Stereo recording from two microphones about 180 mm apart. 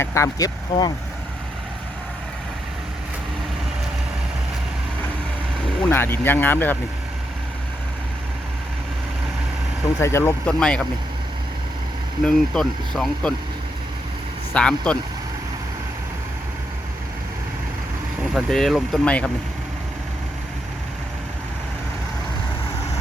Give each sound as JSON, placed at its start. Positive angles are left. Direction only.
{"t": 0.0, "sound": "speech", "side_deg": 15}
{"t": 5.8, "sound": "speech", "side_deg": 10}
{"t": 10.0, "sound": "speech", "side_deg": 15}
{"t": 12.2, "sound": "speech", "side_deg": 0}
{"t": 14.5, "sound": "speech", "side_deg": 5}
{"t": 18.3, "sound": "speech", "side_deg": 0}